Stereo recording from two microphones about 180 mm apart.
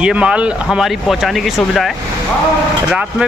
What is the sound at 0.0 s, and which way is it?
Speech, 5° right (ahead or behind).